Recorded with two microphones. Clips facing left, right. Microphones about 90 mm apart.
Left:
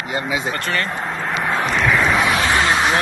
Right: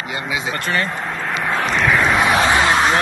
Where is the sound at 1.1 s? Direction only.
Centre (ahead or behind).